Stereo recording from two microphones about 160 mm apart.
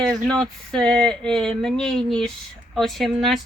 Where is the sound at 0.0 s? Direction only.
5° left (ahead or behind).